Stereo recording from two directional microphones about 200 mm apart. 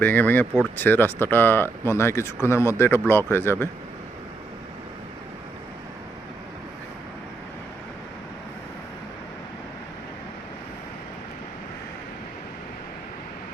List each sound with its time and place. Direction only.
0.0 s speech: 10° left (ahead or behind)